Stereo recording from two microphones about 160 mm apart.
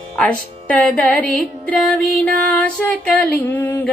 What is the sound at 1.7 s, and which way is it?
Mantra, 10° left (ahead or behind).